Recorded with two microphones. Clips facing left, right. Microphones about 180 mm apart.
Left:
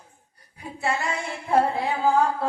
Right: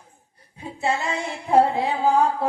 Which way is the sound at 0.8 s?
20° right (ahead or behind).